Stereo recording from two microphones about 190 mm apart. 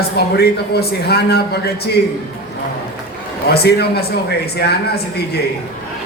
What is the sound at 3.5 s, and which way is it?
Speech, 60° left (ahead or behind).